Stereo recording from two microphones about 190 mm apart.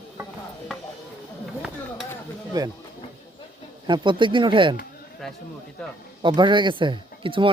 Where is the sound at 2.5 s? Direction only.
20° right (ahead or behind).